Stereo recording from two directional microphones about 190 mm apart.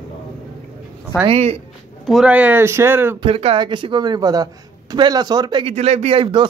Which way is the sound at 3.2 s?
30° right (ahead or behind).